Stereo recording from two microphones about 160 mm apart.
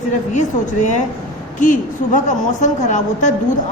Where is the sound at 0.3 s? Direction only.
50° left (ahead or behind).